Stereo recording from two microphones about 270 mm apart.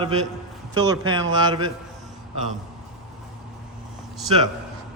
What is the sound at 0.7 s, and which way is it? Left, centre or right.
A man's voice, centre.